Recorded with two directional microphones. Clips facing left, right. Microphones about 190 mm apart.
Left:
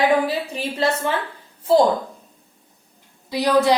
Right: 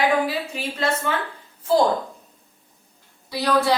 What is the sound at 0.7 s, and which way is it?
Speech, 35° left (ahead or behind).